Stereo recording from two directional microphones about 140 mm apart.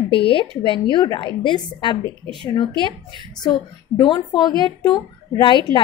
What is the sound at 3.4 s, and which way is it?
Speech, 30° left (ahead or behind).